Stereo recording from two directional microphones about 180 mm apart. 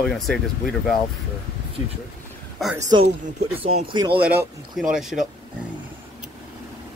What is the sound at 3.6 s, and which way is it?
Speech, 30° right (ahead or behind).